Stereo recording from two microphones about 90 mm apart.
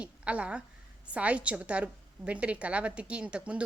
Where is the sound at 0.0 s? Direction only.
15° right (ahead or behind).